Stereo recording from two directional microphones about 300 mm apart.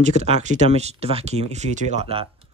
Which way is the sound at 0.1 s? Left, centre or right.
Right.